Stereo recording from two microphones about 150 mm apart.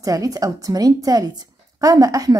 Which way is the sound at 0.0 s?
25° right (ahead or behind).